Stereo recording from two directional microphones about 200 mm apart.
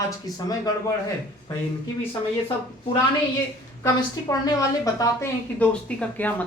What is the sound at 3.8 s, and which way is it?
Speech, 15° left (ahead or behind).